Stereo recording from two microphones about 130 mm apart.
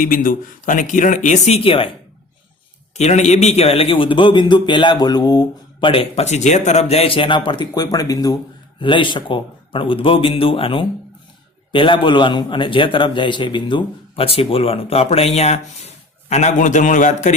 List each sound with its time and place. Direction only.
0.0 s speech: 90° left; by 2.0 s 40° left (ahead or behind)
2.9 s a man's voice: 60° left (ahead or behind); by 8.4 s 30° left (ahead or behind)
8.8 s a man's voice: 40° left (ahead or behind); by 17.3 s 70° left (ahead or behind)